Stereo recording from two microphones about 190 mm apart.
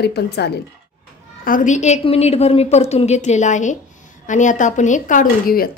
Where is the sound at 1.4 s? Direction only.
45° left (ahead or behind).